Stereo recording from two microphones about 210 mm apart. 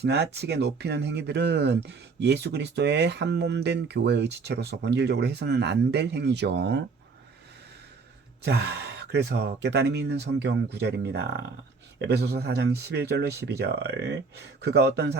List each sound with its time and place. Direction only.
0.0 s speech: 50° right (ahead or behind)
8.4 s speech: 55° right (ahead or behind)